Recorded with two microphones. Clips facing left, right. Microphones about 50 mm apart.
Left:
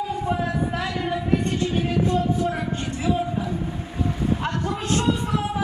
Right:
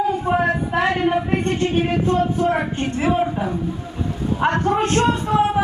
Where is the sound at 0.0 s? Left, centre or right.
Right.